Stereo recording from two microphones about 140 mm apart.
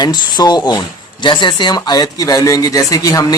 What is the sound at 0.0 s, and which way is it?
Speech, 30° left (ahead or behind).